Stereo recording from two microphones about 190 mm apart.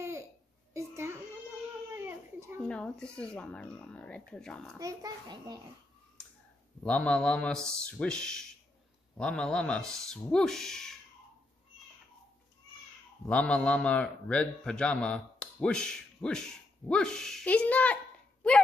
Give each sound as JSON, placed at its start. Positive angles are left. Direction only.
{"t": 0.7, "sound": "a sound", "side_deg": -15}
{"t": 2.0, "sound": "baby cry", "side_deg": -10}
{"t": 2.7, "sound": "a man's voice", "side_deg": 5}
{"t": 4.7, "sound": "a child's voice", "side_deg": -20}
{"t": 6.8, "sound": "a man's voice", "side_deg": 5}
{"t": 13.3, "sound": "a man's voice", "side_deg": 5}